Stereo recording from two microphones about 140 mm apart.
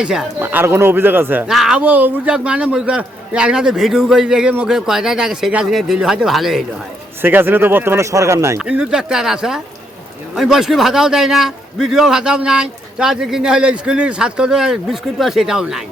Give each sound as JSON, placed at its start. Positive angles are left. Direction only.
{"t": 0.0, "sound": "a man's voice", "side_deg": -5}
{"t": 0.3, "sound": "speech", "side_deg": -15}
{"t": 1.5, "sound": "a man's voice", "side_deg": -5}
{"t": 7.2, "sound": "speech", "side_deg": -15}
{"t": 8.5, "sound": "a man's voice", "side_deg": -5}